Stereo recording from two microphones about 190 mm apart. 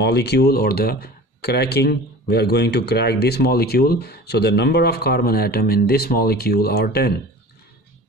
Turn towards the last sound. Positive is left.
turn(degrees=55)  # may be behind; listen again after turning